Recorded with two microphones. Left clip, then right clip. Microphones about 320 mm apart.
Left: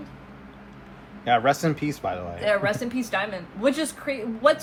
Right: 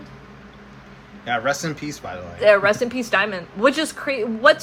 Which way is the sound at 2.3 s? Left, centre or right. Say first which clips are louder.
Right 10 dB; right.